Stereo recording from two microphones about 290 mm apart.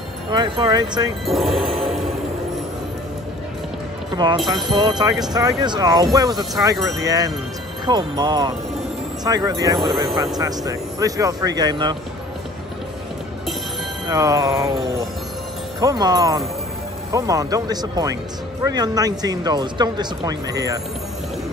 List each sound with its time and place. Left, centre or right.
0.3 s speech: centre
1.2 s music: centre
4.4 s speech: centre
4.7 s speech: centre
14.0 s speech: centre
15.8 s speech: centre